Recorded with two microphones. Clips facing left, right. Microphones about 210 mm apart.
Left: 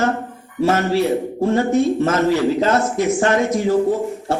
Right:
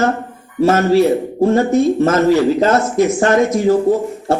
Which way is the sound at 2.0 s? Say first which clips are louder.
Right 4 dB; 45° right (ahead or behind).